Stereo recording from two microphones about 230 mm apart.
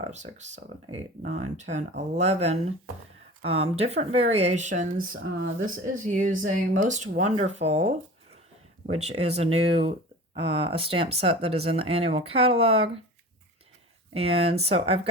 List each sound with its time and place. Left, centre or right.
0.1 s speech: right
14.1 s speech: right